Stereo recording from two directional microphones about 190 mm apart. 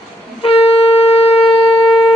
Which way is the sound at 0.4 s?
30° left (ahead or behind).